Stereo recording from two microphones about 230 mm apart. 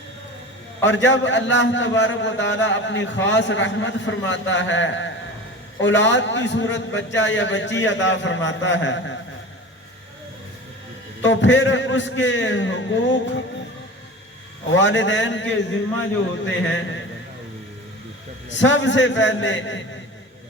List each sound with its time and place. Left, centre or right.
0.8 s a man's voice: left
11.2 s a man's voice: left
14.7 s a man's voice: left
18.5 s a man's voice: left